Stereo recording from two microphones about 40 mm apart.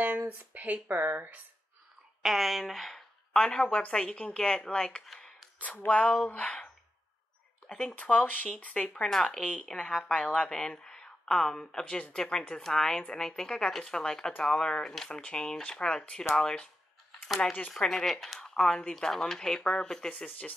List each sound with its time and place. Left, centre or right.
0.0 s speech: right
2.2 s a woman's voice: centre; by 6.7 s left
7.9 s speech: left
8.7 s a woman's voice: left
9.1 s speech: centre
9.4 s a woman's voice: left
11.9 s a woman's voice: left
12.2 s a woman's voice: centre
17.8 s speech: centre
20.2 s speech: left